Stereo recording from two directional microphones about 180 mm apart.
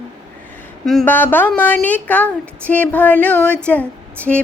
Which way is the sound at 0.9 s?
5° left (ahead or behind).